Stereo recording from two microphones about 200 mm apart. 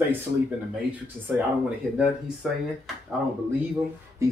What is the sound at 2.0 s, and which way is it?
Speech, centre (ahead or behind).